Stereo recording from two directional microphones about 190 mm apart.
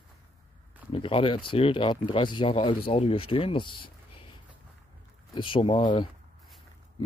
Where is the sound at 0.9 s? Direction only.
30° left (ahead or behind).